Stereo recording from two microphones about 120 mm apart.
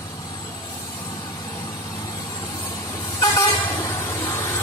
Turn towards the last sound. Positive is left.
turn(degrees=20)  # may be behind; listen again after turning